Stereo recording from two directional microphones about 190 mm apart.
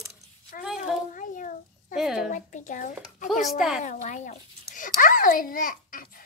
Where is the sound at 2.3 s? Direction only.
45° left (ahead or behind).